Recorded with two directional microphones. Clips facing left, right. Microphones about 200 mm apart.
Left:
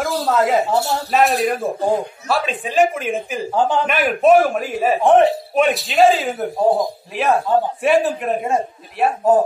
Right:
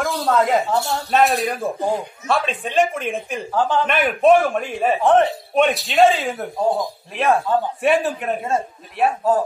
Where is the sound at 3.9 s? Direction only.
5° left (ahead or behind).